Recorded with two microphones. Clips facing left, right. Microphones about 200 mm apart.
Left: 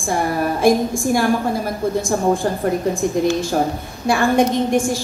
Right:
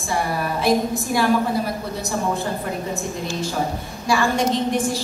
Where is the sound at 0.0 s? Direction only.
50° left (ahead or behind).